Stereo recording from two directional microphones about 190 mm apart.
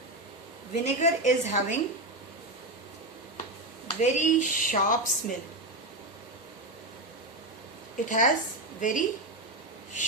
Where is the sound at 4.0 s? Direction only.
40° left (ahead or behind).